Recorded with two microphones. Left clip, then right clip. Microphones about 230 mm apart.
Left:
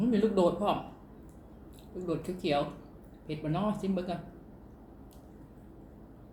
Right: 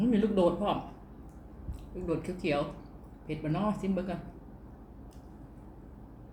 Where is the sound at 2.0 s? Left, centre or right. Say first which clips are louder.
Even; centre.